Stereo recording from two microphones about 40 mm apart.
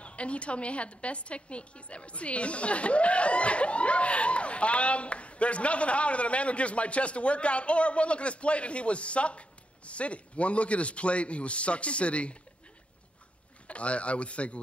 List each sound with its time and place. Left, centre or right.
0.0 s a woman's voice: left
13.7 s a woman's voice: left